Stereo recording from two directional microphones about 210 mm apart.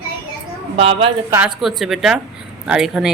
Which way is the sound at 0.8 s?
25° right (ahead or behind).